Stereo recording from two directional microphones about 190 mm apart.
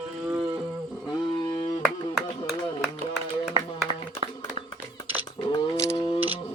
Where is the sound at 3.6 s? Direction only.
25° right (ahead or behind).